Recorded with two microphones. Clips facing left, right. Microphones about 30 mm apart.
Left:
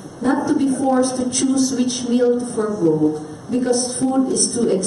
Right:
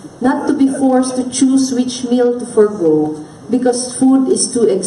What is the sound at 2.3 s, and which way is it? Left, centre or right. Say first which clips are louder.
Speech: right 6 dB; right.